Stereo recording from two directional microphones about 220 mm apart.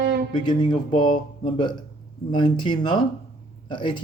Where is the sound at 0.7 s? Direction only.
25° left (ahead or behind).